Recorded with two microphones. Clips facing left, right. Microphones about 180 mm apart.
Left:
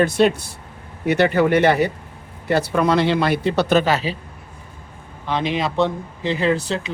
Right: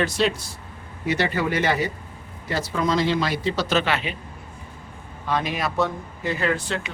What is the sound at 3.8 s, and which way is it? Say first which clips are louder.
Speech: left 5 dB; 40° left (ahead or behind).